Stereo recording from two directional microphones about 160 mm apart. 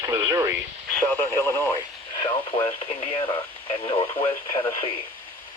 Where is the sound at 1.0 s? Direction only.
15° left (ahead or behind).